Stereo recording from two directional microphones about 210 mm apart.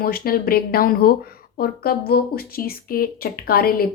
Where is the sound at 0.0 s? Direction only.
45° left (ahead or behind).